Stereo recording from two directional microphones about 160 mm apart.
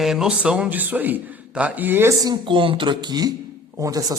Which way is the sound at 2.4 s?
30° right (ahead or behind).